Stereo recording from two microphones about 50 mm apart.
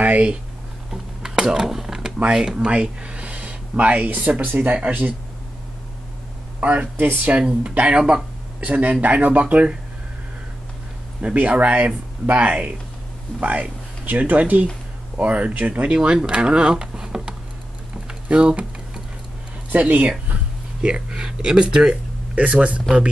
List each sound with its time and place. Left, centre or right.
0.0 s speech: right
1.2 s a sound: centre
2.2 s speech: centre; by 4.7 s right
6.6 s speech: right
7.3 s speech: centre
11.1 s speech: right
19.7 s speech: right
20.8 s speech: centre
22.3 s speech: right